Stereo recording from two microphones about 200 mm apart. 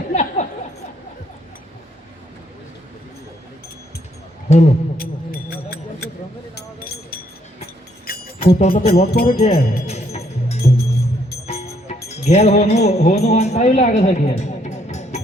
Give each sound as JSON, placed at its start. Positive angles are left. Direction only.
{"t": 0.1, "sound": "a sound", "side_deg": 35}
{"t": 4.4, "sound": "speech", "side_deg": 35}
{"t": 4.9, "sound": "a sound", "side_deg": 50}
{"t": 8.0, "sound": "music", "side_deg": 50}
{"t": 8.4, "sound": "speech", "side_deg": 30}
{"t": 8.9, "sound": "speech", "side_deg": 50}
{"t": 9.4, "sound": "speech", "side_deg": 35}
{"t": 9.8, "sound": "music", "side_deg": 30}
{"t": 12.0, "sound": "music", "side_deg": 35}
{"t": 13.2, "sound": "speech", "side_deg": 35}